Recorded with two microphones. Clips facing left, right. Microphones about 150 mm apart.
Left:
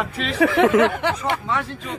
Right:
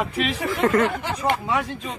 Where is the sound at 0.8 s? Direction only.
70° left (ahead or behind).